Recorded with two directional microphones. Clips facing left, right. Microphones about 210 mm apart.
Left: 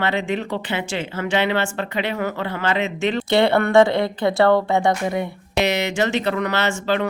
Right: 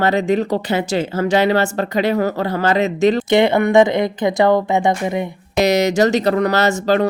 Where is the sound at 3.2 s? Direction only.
20° right (ahead or behind).